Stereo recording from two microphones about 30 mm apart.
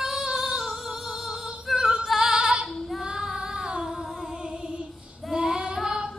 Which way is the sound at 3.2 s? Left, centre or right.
Right.